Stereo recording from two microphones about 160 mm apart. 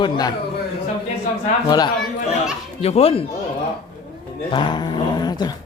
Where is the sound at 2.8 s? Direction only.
40° left (ahead or behind).